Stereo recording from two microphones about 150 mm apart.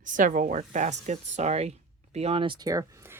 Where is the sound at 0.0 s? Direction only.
60° right (ahead or behind).